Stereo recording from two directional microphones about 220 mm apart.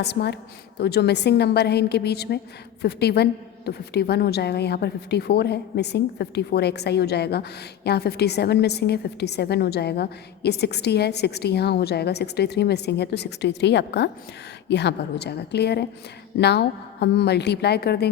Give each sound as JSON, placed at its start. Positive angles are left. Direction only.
{"t": 0.0, "sound": "a woman's voice", "side_deg": 50}